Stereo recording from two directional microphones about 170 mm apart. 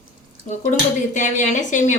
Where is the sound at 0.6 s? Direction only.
45° left (ahead or behind).